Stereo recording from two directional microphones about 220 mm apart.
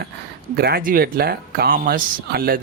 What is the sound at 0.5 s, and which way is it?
Speech, 45° right (ahead or behind).